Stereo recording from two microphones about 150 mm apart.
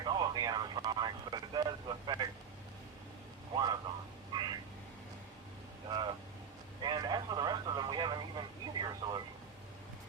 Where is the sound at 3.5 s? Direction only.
30° right (ahead or behind).